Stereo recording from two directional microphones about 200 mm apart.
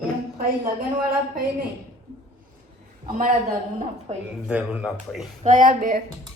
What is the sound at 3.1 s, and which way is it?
Speech, 40° right (ahead or behind).